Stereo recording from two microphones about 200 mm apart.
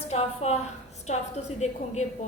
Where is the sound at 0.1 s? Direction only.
30° left (ahead or behind).